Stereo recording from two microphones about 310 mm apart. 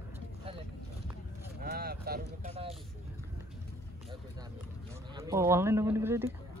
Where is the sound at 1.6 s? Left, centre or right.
Right.